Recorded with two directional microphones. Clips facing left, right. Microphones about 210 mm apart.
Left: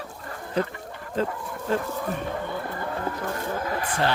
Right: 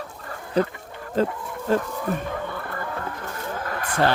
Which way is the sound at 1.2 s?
40° right (ahead or behind).